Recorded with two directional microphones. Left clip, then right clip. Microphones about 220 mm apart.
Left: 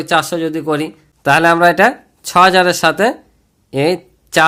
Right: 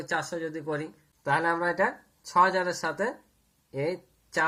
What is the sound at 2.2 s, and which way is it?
Speech, 65° left (ahead or behind).